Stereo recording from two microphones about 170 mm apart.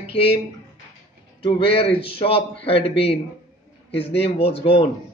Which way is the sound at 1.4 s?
30° left (ahead or behind).